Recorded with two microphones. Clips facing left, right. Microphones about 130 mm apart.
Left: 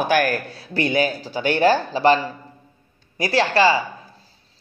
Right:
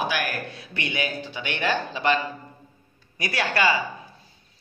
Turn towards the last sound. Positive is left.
turn(degrees=30)  # may be behind; listen again after turning